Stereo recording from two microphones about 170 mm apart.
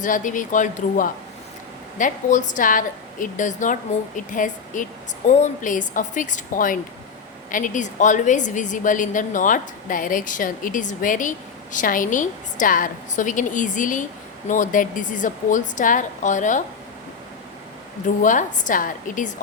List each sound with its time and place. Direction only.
0.0 s a woman's voice: 50° left (ahead or behind)
18.2 s a woman's voice: 50° left (ahead or behind)